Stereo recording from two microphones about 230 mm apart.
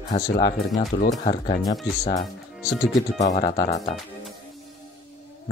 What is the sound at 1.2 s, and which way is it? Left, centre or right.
Speech, left.